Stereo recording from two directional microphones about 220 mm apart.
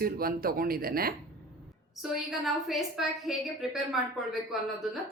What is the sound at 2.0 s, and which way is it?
A woman's voice, centre (ahead or behind).